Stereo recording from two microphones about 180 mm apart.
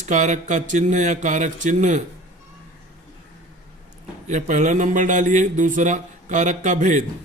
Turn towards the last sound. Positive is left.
turn(degrees=-45)  # may be behind; listen again after turning